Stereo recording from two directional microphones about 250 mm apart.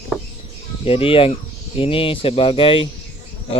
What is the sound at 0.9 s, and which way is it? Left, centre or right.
Speech, left.